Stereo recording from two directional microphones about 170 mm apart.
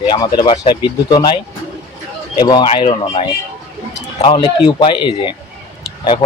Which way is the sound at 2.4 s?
25° left (ahead or behind).